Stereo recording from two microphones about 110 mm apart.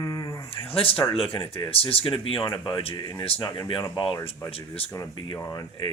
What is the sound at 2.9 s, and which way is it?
Speech, 40° left (ahead or behind).